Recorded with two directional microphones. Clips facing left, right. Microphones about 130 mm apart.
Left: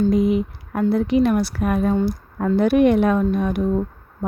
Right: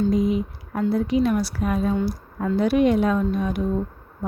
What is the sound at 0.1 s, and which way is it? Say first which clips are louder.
A woman's voice: left 3 dB; 65° left (ahead or behind).